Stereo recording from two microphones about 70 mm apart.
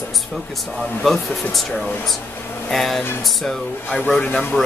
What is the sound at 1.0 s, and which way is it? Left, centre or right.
Speech, centre.